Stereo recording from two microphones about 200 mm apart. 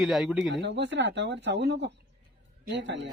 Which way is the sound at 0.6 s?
60° right (ahead or behind).